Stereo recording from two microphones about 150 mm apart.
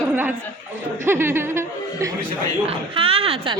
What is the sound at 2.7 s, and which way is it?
Speech, 40° right (ahead or behind).